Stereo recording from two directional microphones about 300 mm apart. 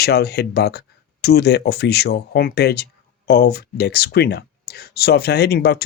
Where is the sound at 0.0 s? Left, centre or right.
Left.